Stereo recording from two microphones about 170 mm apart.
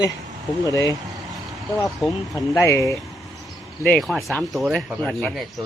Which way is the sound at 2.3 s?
20° left (ahead or behind).